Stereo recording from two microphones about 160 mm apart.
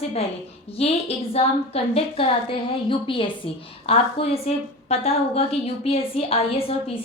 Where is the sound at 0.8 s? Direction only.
40° left (ahead or behind).